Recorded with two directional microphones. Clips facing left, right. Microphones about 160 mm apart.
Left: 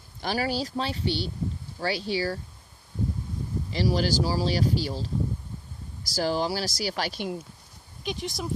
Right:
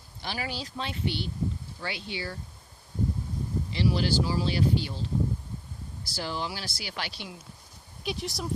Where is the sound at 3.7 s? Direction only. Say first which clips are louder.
Left 2 dB; 40° left (ahead or behind).